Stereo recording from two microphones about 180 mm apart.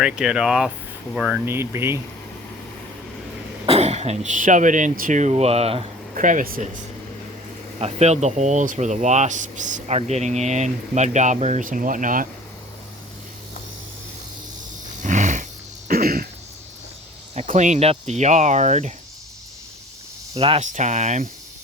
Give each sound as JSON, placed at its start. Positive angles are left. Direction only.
{"t": 0.0, "sound": "speech", "side_deg": -5}
{"t": 3.7, "sound": "speech", "side_deg": -35}
{"t": 6.1, "sound": "speech", "side_deg": -50}
{"t": 7.8, "sound": "speech", "side_deg": -35}
{"t": 15.0, "sound": "snoring", "side_deg": -45}
{"t": 15.9, "sound": "a sound", "side_deg": -55}
{"t": 17.3, "sound": "speech", "side_deg": -40}
{"t": 20.3, "sound": "speech", "side_deg": -30}